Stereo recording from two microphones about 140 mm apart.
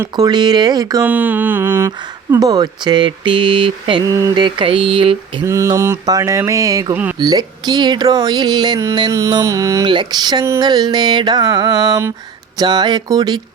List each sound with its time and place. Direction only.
0.0 s speech: 30° right (ahead or behind)
1.0 s mantra: 10° right (ahead or behind)
2.4 s a sound: 25° right (ahead or behind)
4.1 s speech: 20° right (ahead or behind)
4.4 s a sound: 35° right (ahead or behind)
5.5 s speech: 20° right (ahead or behind)
6.9 s mantra: 10° right (ahead or behind)
7.2 s speech: 30° right (ahead or behind)